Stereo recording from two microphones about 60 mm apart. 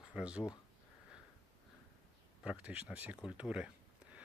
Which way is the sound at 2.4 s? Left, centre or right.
Centre.